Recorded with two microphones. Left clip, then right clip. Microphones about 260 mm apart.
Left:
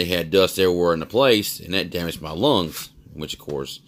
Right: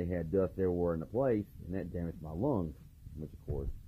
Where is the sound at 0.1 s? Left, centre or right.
Left.